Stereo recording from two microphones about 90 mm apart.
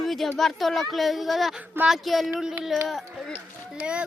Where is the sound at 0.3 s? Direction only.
Centre (ahead or behind).